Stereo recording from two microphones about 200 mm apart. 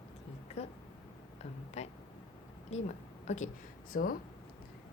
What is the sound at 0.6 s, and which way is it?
A woman's voice, 35° left (ahead or behind).